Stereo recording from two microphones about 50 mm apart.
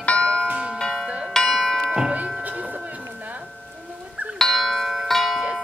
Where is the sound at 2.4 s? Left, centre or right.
Right.